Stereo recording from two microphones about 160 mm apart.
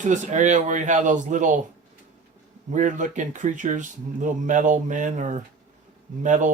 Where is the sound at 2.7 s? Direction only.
50° right (ahead or behind).